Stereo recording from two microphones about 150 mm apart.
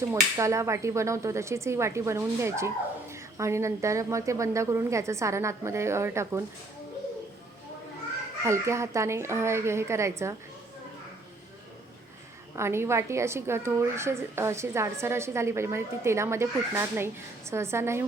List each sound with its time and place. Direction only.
0.1 s speech: 20° right (ahead or behind)
8.4 s speech: 20° right (ahead or behind)
12.5 s a woman's voice: 15° right (ahead or behind)